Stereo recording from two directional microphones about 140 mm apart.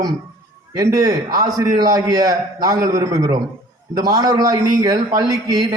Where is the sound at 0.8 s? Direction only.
25° right (ahead or behind).